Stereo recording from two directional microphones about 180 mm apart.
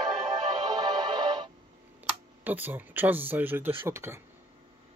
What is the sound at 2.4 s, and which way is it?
Speech, 10° right (ahead or behind).